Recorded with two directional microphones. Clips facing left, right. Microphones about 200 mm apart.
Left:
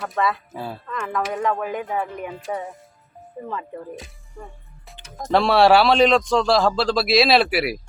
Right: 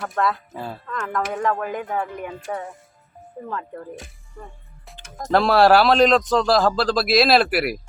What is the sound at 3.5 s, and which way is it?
Speech, 5° left (ahead or behind).